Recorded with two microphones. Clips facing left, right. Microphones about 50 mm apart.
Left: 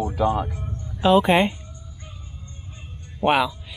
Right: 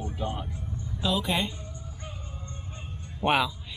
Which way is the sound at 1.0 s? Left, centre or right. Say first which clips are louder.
Left 11 dB; left.